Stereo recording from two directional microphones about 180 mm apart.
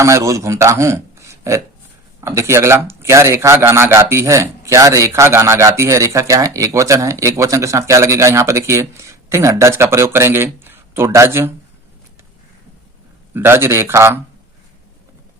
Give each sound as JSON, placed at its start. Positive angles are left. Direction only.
{"t": 0.0, "sound": "a man's voice", "side_deg": -15}
{"t": 13.3, "sound": "a man's voice", "side_deg": -15}